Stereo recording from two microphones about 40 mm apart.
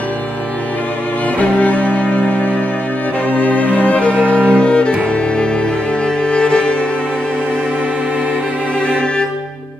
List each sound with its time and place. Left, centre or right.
1.4 s music: left
3.3 s music: left
4.5 s cello: left
6.2 s cello: left